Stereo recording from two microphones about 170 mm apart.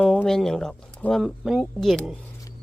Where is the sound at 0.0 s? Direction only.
Centre (ahead or behind).